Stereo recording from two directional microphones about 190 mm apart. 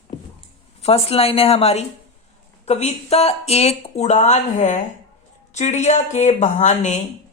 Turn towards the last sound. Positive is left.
turn(degrees=40)  # may be behind; listen again after turning